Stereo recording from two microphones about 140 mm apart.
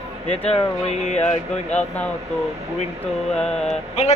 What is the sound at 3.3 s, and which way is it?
Speech, 5° left (ahead or behind).